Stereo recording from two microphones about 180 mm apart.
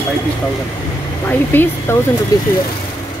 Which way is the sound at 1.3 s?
10° left (ahead or behind).